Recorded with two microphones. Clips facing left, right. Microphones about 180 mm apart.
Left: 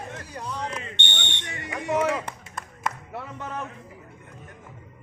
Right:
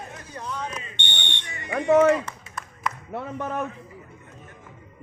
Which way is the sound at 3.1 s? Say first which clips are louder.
Right 5 dB; 55° right (ahead or behind).